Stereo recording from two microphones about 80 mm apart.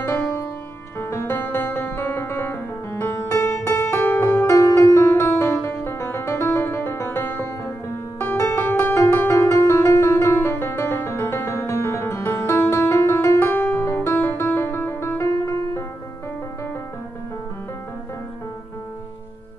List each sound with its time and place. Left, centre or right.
0.0 s music: left